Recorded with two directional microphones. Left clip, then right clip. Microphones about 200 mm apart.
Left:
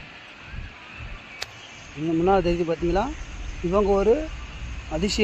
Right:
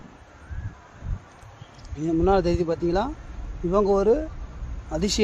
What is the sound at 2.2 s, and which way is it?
Speech, 5° right (ahead or behind).